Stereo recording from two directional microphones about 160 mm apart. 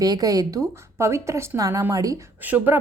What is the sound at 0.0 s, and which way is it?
A woman's voice, 25° right (ahead or behind).